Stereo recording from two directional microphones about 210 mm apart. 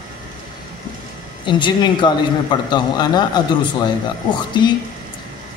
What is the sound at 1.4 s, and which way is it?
A man's voice, 20° left (ahead or behind).